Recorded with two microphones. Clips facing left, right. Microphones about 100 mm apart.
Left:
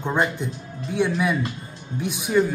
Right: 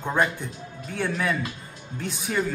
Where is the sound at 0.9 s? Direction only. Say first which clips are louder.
Left 4 dB; 15° left (ahead or behind).